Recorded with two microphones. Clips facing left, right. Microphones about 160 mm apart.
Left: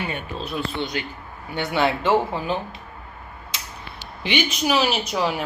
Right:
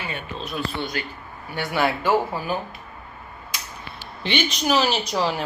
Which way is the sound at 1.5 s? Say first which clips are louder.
Left 1 dB; 20° left (ahead or behind).